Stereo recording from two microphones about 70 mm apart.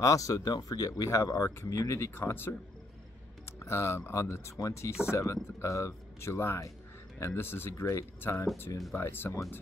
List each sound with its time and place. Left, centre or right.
0.0 s speech: left